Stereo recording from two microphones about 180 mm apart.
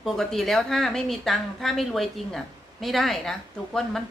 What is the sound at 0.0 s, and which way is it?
Speech, centre (ahead or behind).